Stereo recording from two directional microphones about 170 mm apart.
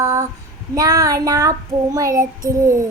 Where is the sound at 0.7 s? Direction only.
20° right (ahead or behind).